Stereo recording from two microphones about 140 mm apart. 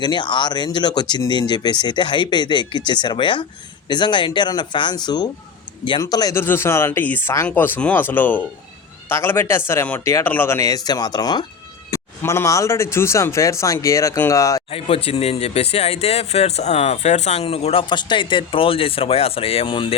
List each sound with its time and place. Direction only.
0.0 s speech: 35° left (ahead or behind)
6.3 s speech: 15° left (ahead or behind)
11.9 s speech: 20° left (ahead or behind)
14.7 s speech: 45° left (ahead or behind)